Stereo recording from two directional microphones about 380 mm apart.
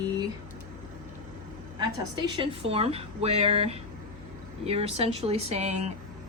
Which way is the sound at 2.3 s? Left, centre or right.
Centre.